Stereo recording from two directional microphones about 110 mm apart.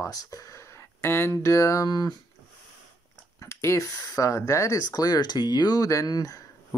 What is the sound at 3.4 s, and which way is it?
Speech, 25° left (ahead or behind).